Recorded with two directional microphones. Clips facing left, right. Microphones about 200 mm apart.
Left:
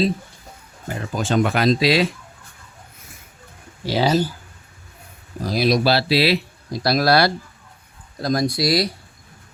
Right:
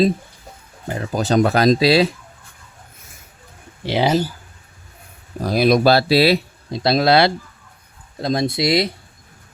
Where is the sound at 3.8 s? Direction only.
20° right (ahead or behind).